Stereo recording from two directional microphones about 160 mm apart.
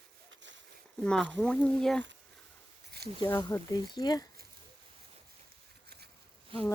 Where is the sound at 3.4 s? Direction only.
20° left (ahead or behind).